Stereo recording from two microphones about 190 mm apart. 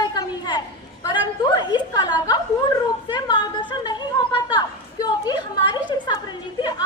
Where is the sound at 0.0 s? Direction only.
20° left (ahead or behind).